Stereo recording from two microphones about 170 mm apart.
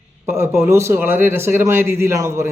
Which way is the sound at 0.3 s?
15° right (ahead or behind).